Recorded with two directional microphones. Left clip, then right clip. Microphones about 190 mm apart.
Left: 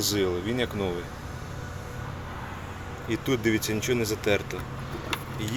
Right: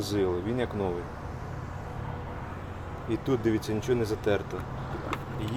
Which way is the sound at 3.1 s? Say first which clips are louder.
Left 2 dB; 5° left (ahead or behind).